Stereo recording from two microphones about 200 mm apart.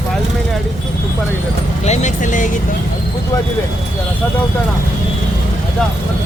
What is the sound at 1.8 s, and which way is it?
Speech, 35° left (ahead or behind).